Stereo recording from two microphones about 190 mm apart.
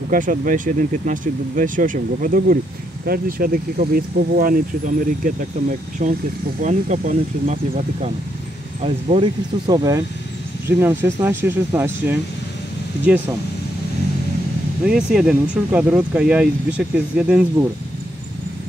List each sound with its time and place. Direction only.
0.1 s speech: 45° right (ahead or behind)
8.8 s speech: 30° right (ahead or behind); by 12.2 s 10° right (ahead or behind)
14.9 s speech: 5° right (ahead or behind)